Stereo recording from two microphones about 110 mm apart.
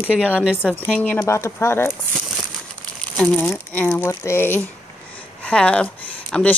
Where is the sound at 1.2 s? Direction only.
25° left (ahead or behind).